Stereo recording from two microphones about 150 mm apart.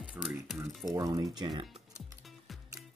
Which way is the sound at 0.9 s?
25° right (ahead or behind).